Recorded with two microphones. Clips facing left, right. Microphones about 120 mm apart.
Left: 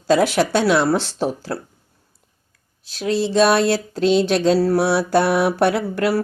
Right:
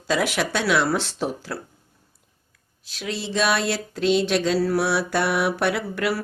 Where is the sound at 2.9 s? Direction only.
35° left (ahead or behind).